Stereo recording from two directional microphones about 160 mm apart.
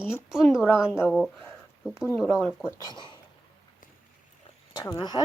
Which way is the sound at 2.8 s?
25° left (ahead or behind).